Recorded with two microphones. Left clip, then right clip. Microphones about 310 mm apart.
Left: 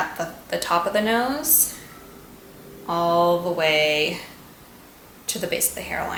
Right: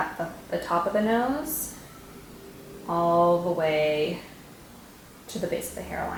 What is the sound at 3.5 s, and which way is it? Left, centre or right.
Speech, centre.